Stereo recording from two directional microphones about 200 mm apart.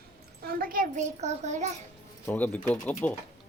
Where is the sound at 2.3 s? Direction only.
10° left (ahead or behind).